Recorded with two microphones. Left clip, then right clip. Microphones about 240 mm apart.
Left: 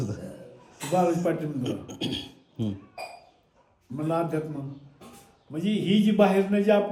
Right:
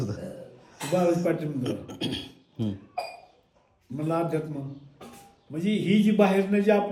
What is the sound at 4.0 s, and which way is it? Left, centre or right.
Speech, centre.